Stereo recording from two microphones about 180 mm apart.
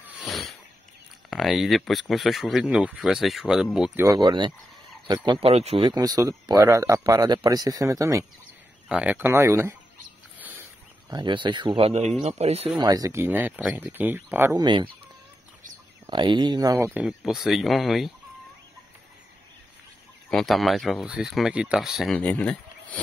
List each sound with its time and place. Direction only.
0.2 s a sound: centre (ahead or behind)
1.3 s speech: centre (ahead or behind)
4.0 s speech: 20° right (ahead or behind)
11.1 s speech: 25° right (ahead or behind)
12.7 s speech: 20° right (ahead or behind)
14.6 s speech: 25° right (ahead or behind)
16.1 s speech: 25° right (ahead or behind); by 18.1 s centre (ahead or behind)
20.2 s speech: centre (ahead or behind)